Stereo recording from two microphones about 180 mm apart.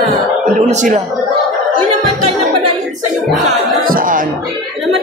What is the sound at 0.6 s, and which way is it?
Speech, 40° right (ahead or behind).